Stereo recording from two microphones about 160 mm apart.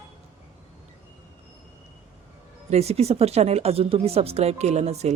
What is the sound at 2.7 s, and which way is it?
Speech, 40° right (ahead or behind).